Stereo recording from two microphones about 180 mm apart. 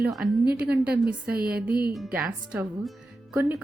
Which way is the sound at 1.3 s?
55° right (ahead or behind).